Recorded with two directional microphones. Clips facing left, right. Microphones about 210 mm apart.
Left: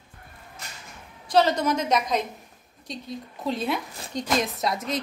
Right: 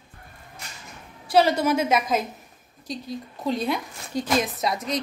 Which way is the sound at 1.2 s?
10° right (ahead or behind).